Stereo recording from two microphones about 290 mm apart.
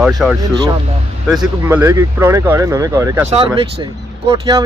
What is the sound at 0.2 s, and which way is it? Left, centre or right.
Speech, centre.